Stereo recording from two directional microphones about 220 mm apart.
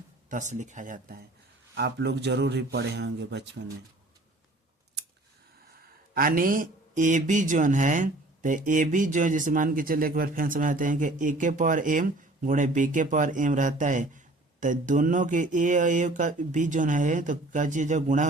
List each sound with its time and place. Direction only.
0.3 s speech: 35° right (ahead or behind)
1.7 s speech: 50° right (ahead or behind)
6.1 s speech: 40° right (ahead or behind)